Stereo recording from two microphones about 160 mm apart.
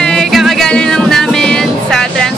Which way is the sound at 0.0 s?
5° left (ahead or behind).